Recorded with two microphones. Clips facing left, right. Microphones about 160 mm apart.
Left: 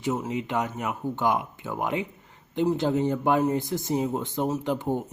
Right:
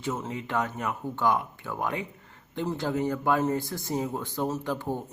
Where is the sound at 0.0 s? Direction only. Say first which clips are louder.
Left 4 dB; 15° left (ahead or behind).